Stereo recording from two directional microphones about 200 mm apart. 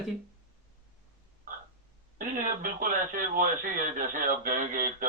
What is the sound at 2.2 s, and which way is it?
Mantra, 40° right (ahead or behind).